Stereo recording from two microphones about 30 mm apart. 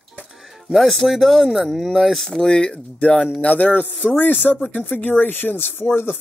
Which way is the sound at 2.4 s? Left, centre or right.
Left.